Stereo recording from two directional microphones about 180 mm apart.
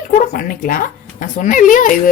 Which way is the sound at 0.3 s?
55° left (ahead or behind).